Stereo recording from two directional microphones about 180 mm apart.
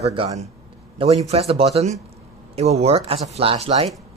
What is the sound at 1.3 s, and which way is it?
Speech, 35° right (ahead or behind).